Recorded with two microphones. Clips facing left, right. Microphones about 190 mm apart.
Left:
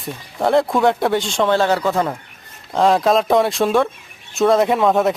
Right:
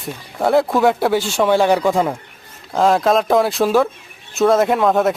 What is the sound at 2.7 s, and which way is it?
Speech, centre (ahead or behind).